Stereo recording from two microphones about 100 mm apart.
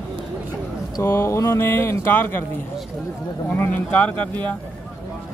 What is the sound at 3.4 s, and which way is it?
Speech, 20° left (ahead or behind).